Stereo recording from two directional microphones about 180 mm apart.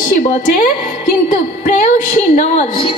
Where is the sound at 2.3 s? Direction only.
40° left (ahead or behind).